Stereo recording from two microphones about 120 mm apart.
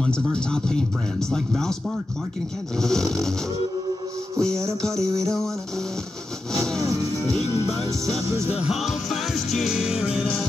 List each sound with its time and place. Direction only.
0.0 s speech: 5° left (ahead or behind)
1.3 s music: 5° left (ahead or behind)
2.8 s music: 5° left (ahead or behind)
4.4 s music: 5° left (ahead or behind)
4.9 s music: 25° right (ahead or behind)
6.5 s music: 5° left (ahead or behind)
7.3 s music: 60° left (ahead or behind)
8.5 s music: 5° right (ahead or behind)